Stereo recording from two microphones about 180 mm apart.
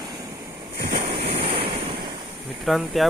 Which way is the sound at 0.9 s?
35° right (ahead or behind).